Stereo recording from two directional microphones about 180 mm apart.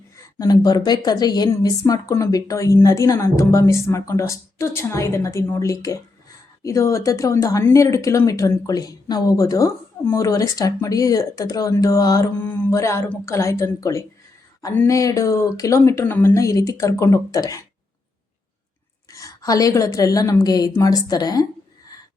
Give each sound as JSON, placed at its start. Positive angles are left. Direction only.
{"t": 0.2, "sound": "speech", "side_deg": 20}
{"t": 19.1, "sound": "a woman's voice", "side_deg": 20}